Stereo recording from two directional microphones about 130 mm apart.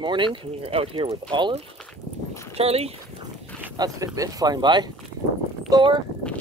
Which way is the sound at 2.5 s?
50° right (ahead or behind).